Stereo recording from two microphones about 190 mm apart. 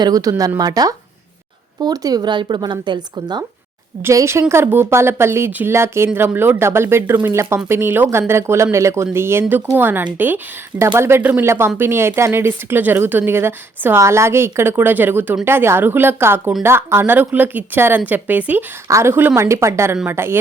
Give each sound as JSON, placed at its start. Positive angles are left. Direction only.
{"t": 0.0, "sound": "speech", "side_deg": -20}